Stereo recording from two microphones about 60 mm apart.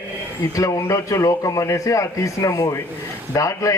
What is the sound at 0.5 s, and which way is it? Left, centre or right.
A man's voice, left.